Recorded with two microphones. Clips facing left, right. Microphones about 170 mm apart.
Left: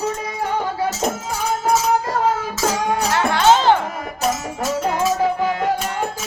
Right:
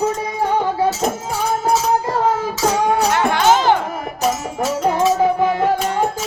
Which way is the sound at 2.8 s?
15° right (ahead or behind).